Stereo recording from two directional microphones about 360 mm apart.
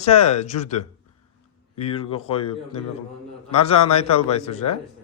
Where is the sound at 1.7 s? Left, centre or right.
Centre.